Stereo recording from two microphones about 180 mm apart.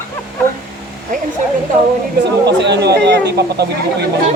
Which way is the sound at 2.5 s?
70° right (ahead or behind).